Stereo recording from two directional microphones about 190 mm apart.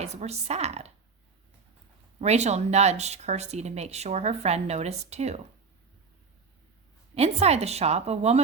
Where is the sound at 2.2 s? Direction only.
35° right (ahead or behind).